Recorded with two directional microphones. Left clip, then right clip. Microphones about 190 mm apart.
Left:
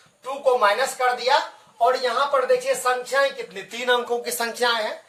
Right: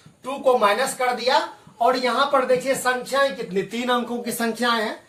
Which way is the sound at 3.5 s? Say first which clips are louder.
Even; 30° left (ahead or behind).